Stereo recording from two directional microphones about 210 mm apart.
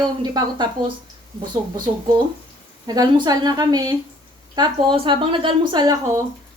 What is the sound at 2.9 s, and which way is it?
A woman's voice, 20° right (ahead or behind).